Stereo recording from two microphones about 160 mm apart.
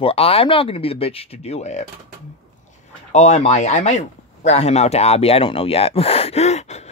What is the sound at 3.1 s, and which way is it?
Speech, 45° left (ahead or behind).